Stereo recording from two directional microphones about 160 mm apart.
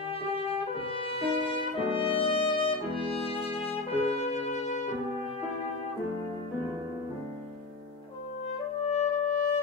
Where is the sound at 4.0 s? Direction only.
40° left (ahead or behind).